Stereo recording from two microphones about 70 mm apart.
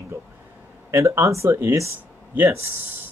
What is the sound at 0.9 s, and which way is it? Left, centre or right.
Speech, right.